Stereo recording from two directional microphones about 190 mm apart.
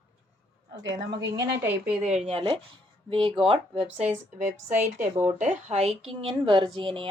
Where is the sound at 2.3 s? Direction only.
30° right (ahead or behind).